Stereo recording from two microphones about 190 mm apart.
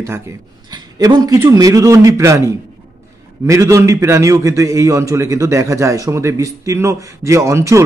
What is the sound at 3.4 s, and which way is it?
A man's voice, 15° right (ahead or behind).